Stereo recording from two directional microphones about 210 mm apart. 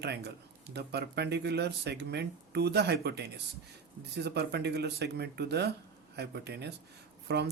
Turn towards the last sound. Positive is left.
turn(degrees=-50)  # may be behind; listen again after turning